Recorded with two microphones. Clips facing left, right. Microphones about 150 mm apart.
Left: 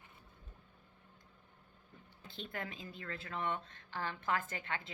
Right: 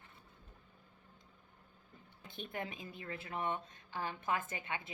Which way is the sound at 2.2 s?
20° right (ahead or behind).